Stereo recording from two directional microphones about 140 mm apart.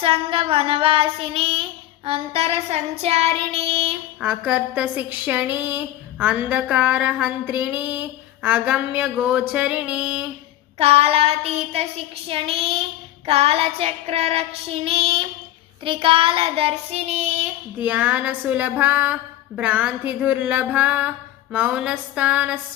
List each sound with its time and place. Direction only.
0.0 s child singing: 40° right (ahead or behind)
4.2 s a woman's voice: 10° right (ahead or behind)
10.8 s child singing: 45° right (ahead or behind)
17.7 s a woman's voice: 10° right (ahead or behind)